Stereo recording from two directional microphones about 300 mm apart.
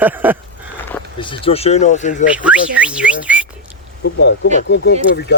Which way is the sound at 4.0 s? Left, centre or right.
Left.